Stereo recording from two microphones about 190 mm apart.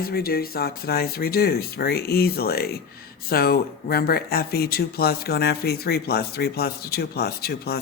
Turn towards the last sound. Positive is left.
turn(degrees=55)  # may be behind; listen again after turning